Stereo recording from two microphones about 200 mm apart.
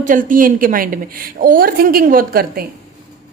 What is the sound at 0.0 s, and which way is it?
A woman's voice, 40° right (ahead or behind).